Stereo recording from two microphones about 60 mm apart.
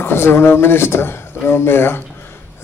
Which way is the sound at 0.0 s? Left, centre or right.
Left.